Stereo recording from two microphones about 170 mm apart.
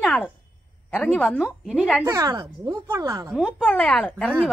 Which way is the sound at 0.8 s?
5° left (ahead or behind).